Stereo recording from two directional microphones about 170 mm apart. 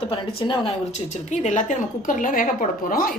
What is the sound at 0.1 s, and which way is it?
Speech, 30° left (ahead or behind).